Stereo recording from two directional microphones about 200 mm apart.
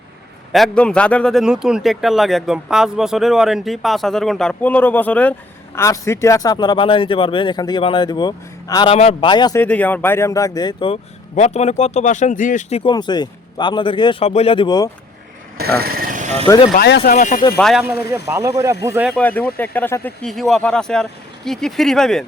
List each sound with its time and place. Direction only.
0.5 s a man's voice: 5° left (ahead or behind); by 9.6 s 20° left (ahead or behind)
9.6 s speech: 10° left (ahead or behind); by 12.8 s 40° left (ahead or behind)
12.8 s speech: 20° left (ahead or behind)
15.8 s vehicle: 50° right (ahead or behind)
16.7 s speech: 50° left (ahead or behind)
17.6 s a man's voice: centre (ahead or behind)
18.1 s speech: 15° right (ahead or behind)
19.1 s a man's voice: 10° left (ahead or behind)